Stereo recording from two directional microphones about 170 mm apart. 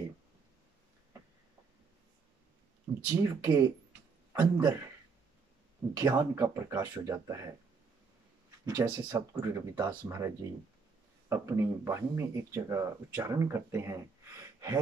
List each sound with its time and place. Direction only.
3.1 s speech: 15° right (ahead or behind)
5.9 s speech: 15° right (ahead or behind)
8.6 s speech: 20° right (ahead or behind)